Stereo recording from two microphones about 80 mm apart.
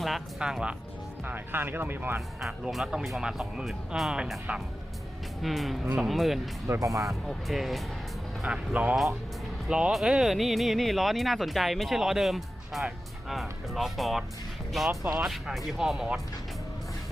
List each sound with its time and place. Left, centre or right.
0.0 s speech: centre
1.2 s speech: right
2.4 s speech: centre
6.7 s speech: right
7.3 s speech: centre
8.4 s speech: centre